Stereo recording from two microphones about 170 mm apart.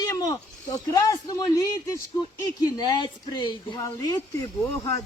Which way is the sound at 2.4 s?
25° left (ahead or behind).